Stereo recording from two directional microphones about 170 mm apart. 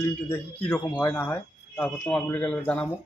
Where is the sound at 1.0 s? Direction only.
10° left (ahead or behind).